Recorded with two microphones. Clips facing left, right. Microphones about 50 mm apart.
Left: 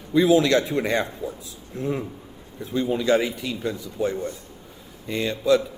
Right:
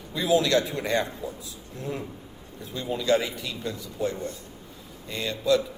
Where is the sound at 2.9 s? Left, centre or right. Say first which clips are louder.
Left 2 dB; left.